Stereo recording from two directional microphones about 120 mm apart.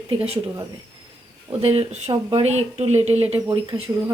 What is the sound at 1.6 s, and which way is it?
Speech, 55° right (ahead or behind).